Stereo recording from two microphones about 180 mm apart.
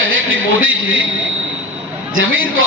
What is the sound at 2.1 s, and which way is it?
Speech, 90° right.